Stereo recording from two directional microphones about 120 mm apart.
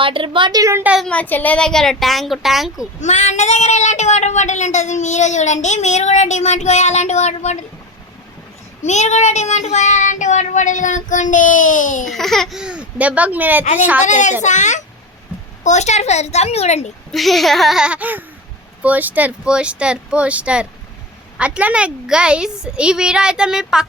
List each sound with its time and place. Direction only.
0.0 s a woman's voice: 45° right (ahead or behind)
0.6 s a woman's voice: 20° right (ahead or behind)
1.0 s speech: 10° left (ahead or behind)
3.0 s a woman's voice: 80° left
8.8 s child singing: 75° left (ahead or behind); by 12.1 s 90° left
12.1 s a woman's voice: centre (ahead or behind); by 13.7 s 15° right (ahead or behind)
14.0 s child singing: 90° left
15.6 s a woman's voice: 75° left (ahead or behind)
17.1 s a woman's voice: centre (ahead or behind)